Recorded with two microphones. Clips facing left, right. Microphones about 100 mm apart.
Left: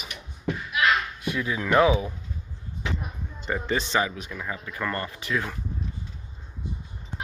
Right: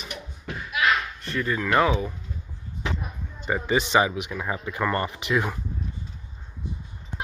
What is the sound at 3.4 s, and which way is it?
Speech, 10° right (ahead or behind).